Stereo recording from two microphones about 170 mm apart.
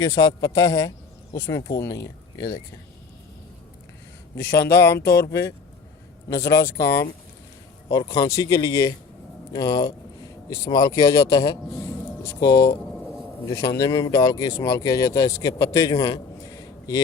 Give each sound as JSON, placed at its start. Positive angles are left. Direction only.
{"t": 0.0, "sound": "speech", "side_deg": 20}
{"t": 4.4, "sound": "a man's voice", "side_deg": 70}
{"t": 4.8, "sound": "speech", "side_deg": 15}
{"t": 7.9, "sound": "speech", "side_deg": 20}